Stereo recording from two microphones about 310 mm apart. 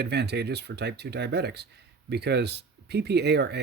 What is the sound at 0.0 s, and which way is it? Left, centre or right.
Speech, right.